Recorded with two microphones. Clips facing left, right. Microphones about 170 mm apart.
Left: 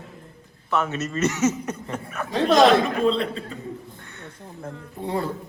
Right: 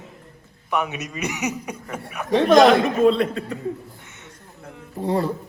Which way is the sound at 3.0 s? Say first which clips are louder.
Right 4 dB; 45° right (ahead or behind).